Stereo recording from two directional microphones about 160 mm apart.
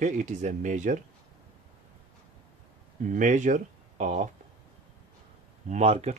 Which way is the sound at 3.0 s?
50° right (ahead or behind).